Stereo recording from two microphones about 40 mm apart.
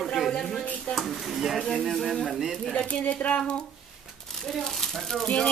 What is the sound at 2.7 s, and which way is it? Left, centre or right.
Speech, left.